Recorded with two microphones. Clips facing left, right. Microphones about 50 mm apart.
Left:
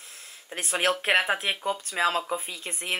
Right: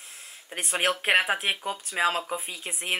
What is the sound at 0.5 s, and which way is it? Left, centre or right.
Speech, centre.